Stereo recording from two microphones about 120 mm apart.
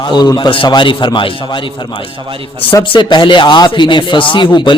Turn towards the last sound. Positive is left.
turn(degrees=40)  # may be behind; listen again after turning